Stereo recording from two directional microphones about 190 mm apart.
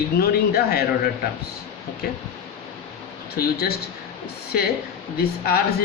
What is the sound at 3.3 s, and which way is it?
Speech, 55° left (ahead or behind).